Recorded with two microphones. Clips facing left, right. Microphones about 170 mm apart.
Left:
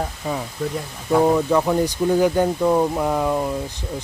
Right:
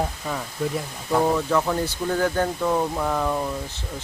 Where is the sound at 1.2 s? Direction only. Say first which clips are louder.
Left 4 dB; 15° left (ahead or behind).